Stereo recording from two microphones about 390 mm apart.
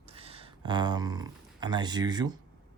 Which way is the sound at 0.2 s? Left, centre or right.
Centre.